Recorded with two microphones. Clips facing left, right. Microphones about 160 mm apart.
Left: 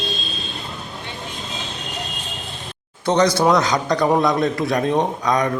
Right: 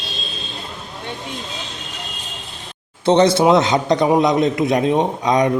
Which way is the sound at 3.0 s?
25° right (ahead or behind).